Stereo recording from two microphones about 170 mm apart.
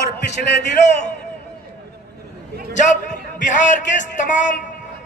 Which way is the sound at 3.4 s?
50° left (ahead or behind).